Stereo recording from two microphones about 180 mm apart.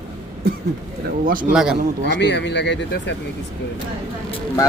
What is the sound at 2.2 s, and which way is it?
Speech, 75° left (ahead or behind).